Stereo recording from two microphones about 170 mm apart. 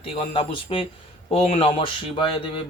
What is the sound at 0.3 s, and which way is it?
A man's voice, 30° left (ahead or behind).